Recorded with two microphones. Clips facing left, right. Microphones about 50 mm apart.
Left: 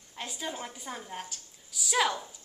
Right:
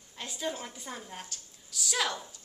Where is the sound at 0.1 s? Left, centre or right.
Centre.